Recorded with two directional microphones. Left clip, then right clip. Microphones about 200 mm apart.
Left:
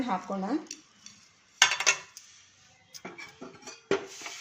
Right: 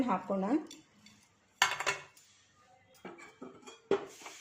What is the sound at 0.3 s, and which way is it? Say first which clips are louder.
Speech: even; 10° right (ahead or behind).